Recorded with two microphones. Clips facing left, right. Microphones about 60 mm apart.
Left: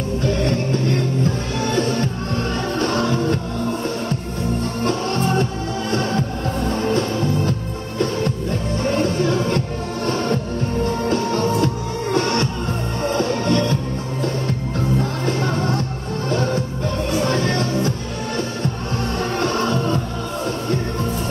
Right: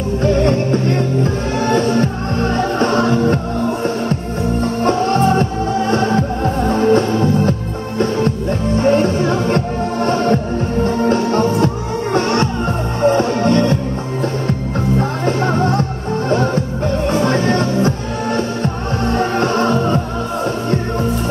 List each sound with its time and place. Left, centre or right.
2.5 s music: right
4.8 s music: right
15.0 s music: right
17.2 s music: right